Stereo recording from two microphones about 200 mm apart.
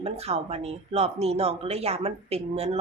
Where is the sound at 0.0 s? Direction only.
30° right (ahead or behind).